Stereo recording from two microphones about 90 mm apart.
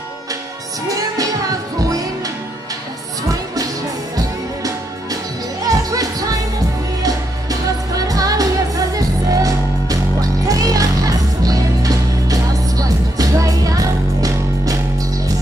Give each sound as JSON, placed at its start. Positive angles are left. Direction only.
{"t": 0.8, "sound": "music", "side_deg": -40}
{"t": 4.6, "sound": "music", "side_deg": -40}